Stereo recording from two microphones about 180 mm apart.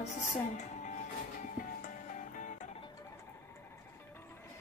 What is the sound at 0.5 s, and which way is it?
Music, 40° left (ahead or behind).